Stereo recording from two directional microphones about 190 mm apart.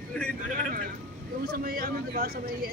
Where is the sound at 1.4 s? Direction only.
50° right (ahead or behind).